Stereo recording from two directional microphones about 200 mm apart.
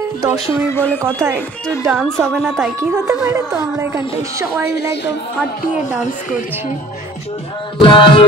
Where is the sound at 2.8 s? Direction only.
15° right (ahead or behind).